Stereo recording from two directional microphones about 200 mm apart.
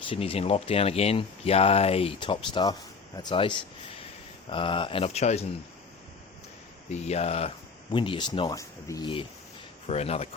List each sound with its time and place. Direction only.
0.1 s speech: 30° left (ahead or behind)
6.9 s speech: 30° left (ahead or behind)